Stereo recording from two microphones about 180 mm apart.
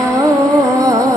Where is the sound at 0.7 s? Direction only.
20° right (ahead or behind).